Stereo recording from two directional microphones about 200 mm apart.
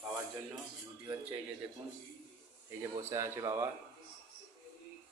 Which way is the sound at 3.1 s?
15° right (ahead or behind).